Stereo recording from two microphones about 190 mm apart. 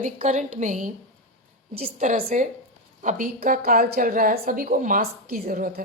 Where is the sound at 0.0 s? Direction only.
40° right (ahead or behind).